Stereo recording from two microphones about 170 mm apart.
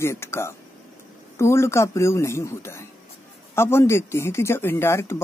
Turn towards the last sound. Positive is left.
turn(degrees=15)  # may be behind; listen again after turning